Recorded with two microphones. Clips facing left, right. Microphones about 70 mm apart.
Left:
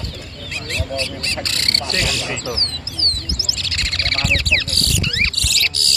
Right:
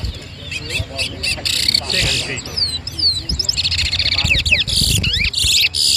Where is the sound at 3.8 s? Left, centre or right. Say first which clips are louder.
Left 2 dB; left.